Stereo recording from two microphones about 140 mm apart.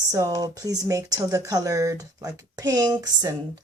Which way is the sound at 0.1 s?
25° right (ahead or behind).